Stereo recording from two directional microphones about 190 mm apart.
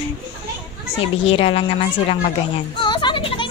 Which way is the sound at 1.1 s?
30° left (ahead or behind).